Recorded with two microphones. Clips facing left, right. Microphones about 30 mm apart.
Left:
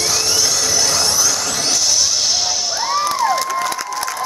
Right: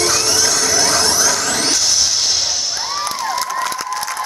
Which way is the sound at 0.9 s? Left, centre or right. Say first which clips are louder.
Right 2 dB; right.